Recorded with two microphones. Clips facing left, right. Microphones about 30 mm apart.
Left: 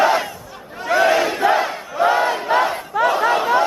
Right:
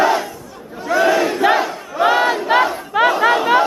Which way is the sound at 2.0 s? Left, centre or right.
Right.